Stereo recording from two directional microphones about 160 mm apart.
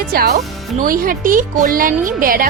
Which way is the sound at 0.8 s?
60° right (ahead or behind).